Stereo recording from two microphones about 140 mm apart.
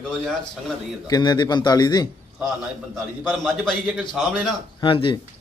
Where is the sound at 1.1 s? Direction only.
30° left (ahead or behind).